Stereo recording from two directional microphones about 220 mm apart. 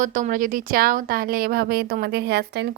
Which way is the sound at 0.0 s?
35° right (ahead or behind).